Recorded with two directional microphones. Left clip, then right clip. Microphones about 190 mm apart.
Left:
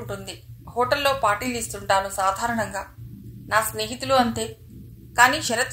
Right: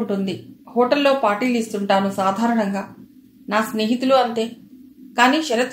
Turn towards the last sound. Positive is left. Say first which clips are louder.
# right 2 dB
turn(degrees=30)  # may be behind; listen again after turning